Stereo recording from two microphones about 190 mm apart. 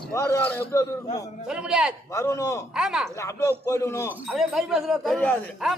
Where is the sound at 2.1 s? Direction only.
15° left (ahead or behind).